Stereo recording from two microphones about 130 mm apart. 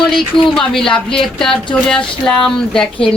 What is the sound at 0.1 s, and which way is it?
A woman's voice, 5° left (ahead or behind).